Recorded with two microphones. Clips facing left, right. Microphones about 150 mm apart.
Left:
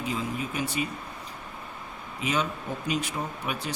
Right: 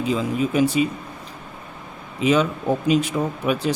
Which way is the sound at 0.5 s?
90° right.